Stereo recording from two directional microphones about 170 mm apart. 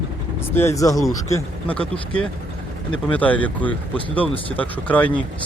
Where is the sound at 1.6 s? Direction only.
5° left (ahead or behind).